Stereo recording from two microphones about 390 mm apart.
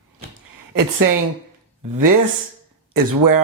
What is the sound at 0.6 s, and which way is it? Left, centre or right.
Speech, right.